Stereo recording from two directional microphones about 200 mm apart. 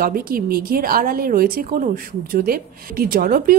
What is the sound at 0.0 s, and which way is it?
A woman's voice, 45° right (ahead or behind).